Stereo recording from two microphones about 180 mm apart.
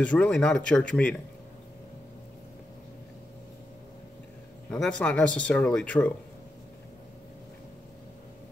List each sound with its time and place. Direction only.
0.0 s speech: 5° left (ahead or behind)
4.6 s speech: 5° left (ahead or behind)